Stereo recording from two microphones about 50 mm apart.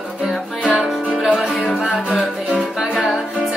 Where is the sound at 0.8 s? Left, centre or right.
Centre.